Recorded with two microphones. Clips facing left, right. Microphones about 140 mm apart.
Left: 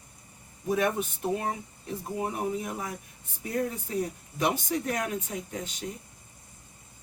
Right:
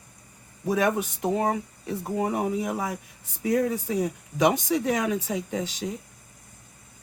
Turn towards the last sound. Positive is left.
turn(degrees=-90)